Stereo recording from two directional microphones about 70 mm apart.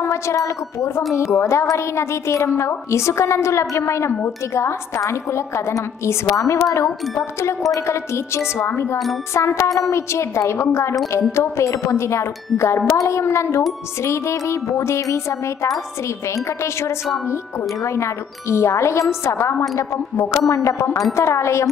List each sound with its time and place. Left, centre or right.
0.0 s a woman's voice: left
17.8 s a woman's voice: left